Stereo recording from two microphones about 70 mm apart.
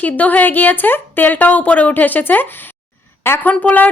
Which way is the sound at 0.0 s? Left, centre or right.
Left.